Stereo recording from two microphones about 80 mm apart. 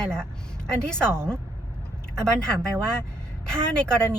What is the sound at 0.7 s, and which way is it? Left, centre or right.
Speech, centre.